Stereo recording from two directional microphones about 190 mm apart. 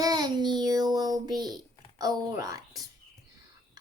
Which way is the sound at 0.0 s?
20° right (ahead or behind).